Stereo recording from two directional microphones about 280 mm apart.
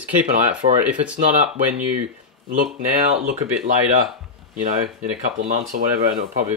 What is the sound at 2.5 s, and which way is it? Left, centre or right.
Speech, right.